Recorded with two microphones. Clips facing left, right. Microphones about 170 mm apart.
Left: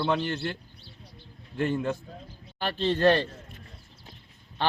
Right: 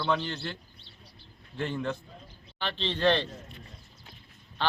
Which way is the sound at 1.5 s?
10° left (ahead or behind).